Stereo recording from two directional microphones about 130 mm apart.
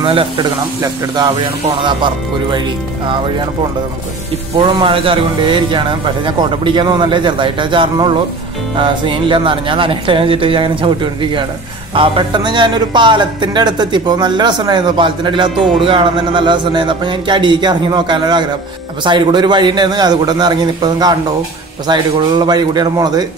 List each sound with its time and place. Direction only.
0.0 s speech: 40° right (ahead or behind)
4.6 s speech: 40° right (ahead or behind)